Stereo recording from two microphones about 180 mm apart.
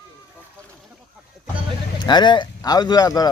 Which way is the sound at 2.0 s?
25° left (ahead or behind).